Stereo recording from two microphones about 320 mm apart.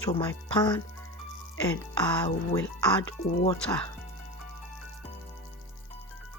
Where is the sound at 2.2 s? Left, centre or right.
Centre.